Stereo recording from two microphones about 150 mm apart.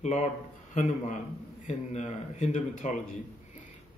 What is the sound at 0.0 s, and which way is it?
Speech, 45° left (ahead or behind).